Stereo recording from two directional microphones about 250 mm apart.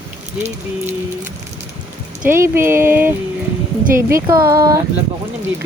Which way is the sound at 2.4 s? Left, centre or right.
Centre.